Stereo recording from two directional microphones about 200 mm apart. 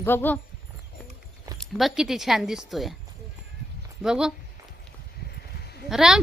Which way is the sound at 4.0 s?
5° right (ahead or behind).